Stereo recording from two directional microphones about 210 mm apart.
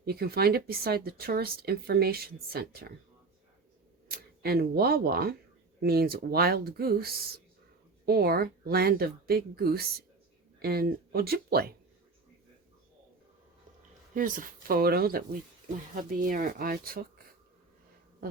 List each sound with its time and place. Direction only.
0.0 s speech: 45° right (ahead or behind)
4.1 s speech: 45° right (ahead or behind)
14.1 s speech: 40° right (ahead or behind)